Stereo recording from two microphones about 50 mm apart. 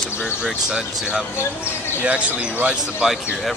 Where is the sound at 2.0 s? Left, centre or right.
Right.